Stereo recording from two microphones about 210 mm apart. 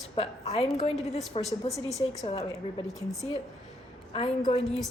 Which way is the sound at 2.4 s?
15° left (ahead or behind).